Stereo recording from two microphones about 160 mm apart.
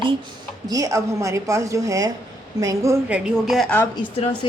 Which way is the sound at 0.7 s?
20° right (ahead or behind).